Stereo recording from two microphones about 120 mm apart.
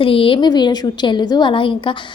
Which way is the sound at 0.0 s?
50° left (ahead or behind).